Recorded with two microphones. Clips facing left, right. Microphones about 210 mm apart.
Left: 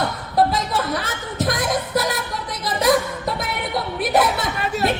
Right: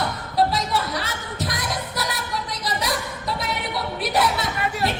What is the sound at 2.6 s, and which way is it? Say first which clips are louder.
Singing: left 11 dB; 50° left (ahead or behind).